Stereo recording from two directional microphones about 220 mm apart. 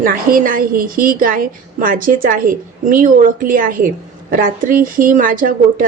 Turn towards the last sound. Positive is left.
turn(degrees=-40)  # may be behind; listen again after turning